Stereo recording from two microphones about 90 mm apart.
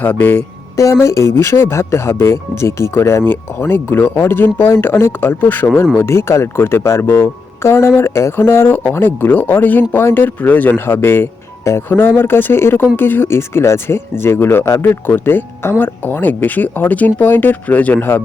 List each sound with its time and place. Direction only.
0.0 s speech: 20° left (ahead or behind)